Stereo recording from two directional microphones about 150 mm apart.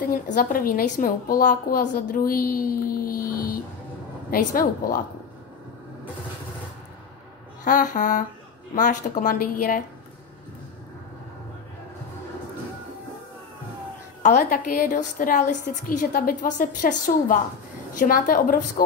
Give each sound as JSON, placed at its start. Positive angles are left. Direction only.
{"t": 0.0, "sound": "a woman's voice", "side_deg": 70}
{"t": 7.6, "sound": "a woman's voice", "side_deg": 60}
{"t": 14.2, "sound": "a woman's voice", "side_deg": 60}